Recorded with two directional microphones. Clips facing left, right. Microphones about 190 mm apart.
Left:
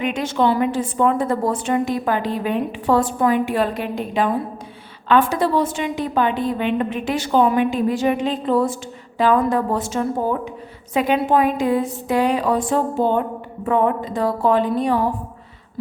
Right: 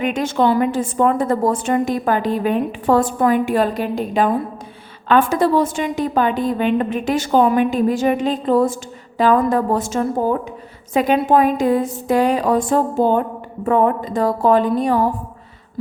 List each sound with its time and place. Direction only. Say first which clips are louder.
0.0 s a woman's voice: right 2 dB; 45° right (ahead or behind)